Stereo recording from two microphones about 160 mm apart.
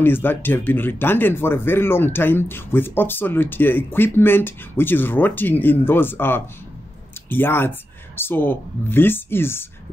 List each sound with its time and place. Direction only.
0.0 s speech: 15° left (ahead or behind)